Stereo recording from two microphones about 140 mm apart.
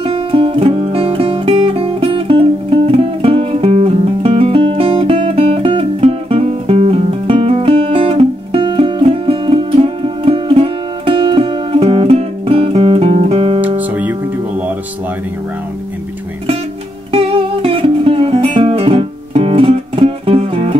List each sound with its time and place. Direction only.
0.0 s music: 40° right (ahead or behind)
13.6 s music: 10° right (ahead or behind)
17.1 s music: 40° right (ahead or behind)